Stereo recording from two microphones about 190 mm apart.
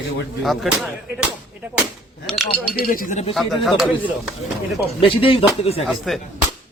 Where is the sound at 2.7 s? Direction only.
50° left (ahead or behind).